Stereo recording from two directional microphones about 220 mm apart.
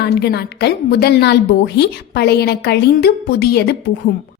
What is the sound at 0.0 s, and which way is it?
A woman's voice, 50° left (ahead or behind).